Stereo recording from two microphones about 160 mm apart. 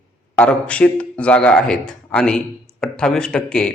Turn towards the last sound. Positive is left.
turn(degrees=5)  # may be behind; listen again after turning